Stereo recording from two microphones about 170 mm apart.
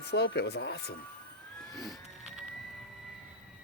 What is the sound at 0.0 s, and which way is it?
Speech, 80° left.